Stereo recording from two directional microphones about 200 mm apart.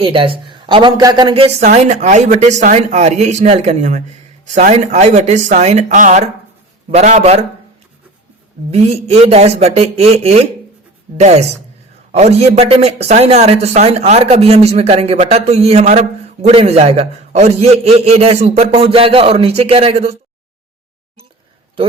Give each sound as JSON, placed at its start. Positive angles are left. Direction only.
{"t": 0.0, "sound": "speech", "side_deg": -25}
{"t": 8.7, "sound": "speech", "side_deg": -30}